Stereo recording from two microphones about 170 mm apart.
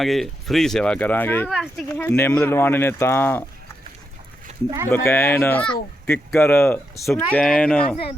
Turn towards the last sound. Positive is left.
turn(degrees=5)  # may be behind; listen again after turning